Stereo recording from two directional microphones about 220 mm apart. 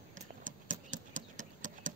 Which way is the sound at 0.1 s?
35° right (ahead or behind).